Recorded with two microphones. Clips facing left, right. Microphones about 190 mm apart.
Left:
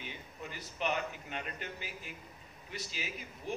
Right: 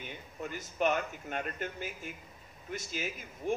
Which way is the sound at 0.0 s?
50° right (ahead or behind).